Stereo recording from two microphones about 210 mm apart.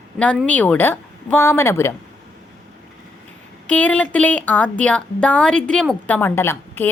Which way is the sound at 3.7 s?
5° left (ahead or behind).